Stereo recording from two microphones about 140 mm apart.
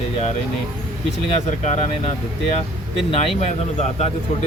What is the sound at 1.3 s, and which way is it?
Speech, 55° left (ahead or behind).